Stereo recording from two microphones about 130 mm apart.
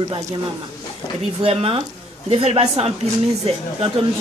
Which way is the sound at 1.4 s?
40° right (ahead or behind).